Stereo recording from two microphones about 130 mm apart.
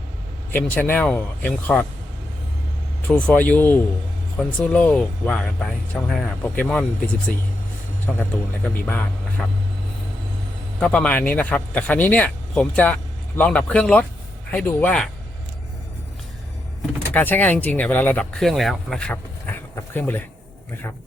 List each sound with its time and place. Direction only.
0.5 s speech: 15° left (ahead or behind)
3.1 s speech: 10° left (ahead or behind)
8.6 s speech: 10° left (ahead or behind)
10.8 s speech: 5° left (ahead or behind)
17.1 s speech: 15° left (ahead or behind)
18.3 s speech: centre (ahead or behind)